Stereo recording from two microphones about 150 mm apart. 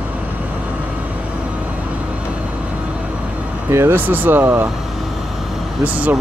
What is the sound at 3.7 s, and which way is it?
Speech, 15° right (ahead or behind).